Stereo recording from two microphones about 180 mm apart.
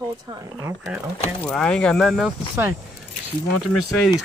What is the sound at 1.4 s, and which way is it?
Speech, 5° left (ahead or behind).